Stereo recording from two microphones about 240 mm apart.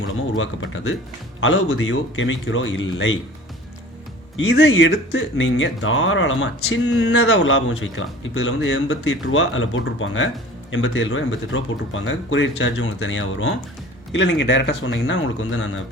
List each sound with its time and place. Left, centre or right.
0.3 s speech: left
4.4 s speech: left